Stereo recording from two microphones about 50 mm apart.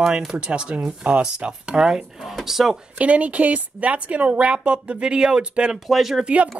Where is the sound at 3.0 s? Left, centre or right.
Right.